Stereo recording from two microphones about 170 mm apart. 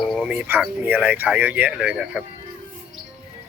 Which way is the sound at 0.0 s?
Centre (ahead or behind).